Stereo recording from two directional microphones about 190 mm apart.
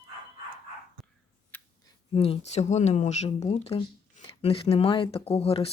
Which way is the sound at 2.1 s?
30° left (ahead or behind).